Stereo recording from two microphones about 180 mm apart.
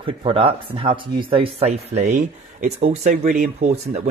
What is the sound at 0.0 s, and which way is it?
Speech, 30° right (ahead or behind).